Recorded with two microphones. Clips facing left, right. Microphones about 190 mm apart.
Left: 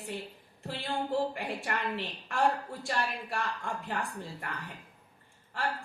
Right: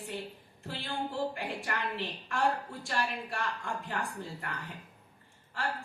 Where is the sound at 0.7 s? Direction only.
60° left (ahead or behind).